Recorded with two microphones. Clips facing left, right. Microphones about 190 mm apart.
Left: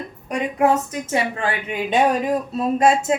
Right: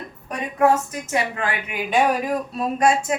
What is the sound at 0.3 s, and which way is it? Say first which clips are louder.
A woman's voice: even; 20° left (ahead or behind).